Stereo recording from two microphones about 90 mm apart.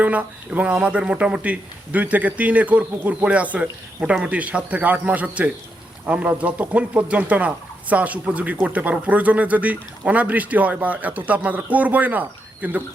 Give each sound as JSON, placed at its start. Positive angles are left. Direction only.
{"t": 0.0, "sound": "speech", "side_deg": -20}